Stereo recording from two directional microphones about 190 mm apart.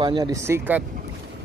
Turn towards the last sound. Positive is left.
turn(degrees=-10)  # may be behind; listen again after turning